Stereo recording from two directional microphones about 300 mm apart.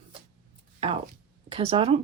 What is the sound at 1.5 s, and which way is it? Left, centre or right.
Speech, centre.